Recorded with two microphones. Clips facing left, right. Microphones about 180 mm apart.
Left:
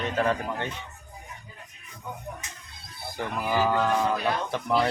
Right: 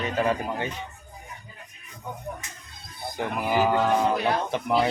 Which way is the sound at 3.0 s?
15° right (ahead or behind).